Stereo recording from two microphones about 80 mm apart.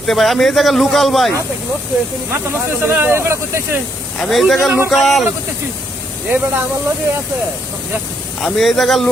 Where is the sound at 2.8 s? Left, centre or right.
Right.